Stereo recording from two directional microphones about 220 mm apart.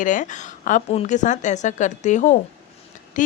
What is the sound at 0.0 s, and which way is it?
Speech, 35° left (ahead or behind).